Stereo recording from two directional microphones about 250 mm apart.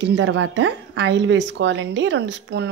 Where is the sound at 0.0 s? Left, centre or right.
Right.